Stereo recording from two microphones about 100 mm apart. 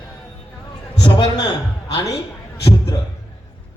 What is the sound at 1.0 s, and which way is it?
Speech, 50° left (ahead or behind).